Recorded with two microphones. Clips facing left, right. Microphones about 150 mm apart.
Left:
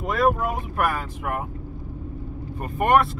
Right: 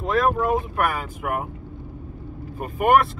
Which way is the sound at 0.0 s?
Centre (ahead or behind).